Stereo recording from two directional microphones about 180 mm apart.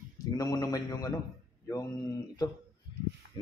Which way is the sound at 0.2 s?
20° left (ahead or behind).